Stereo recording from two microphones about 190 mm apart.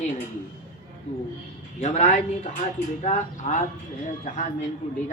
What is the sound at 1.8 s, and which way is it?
A man's voice, 40° left (ahead or behind).